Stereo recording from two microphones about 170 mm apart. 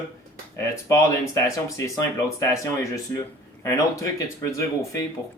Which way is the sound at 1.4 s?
20° left (ahead or behind).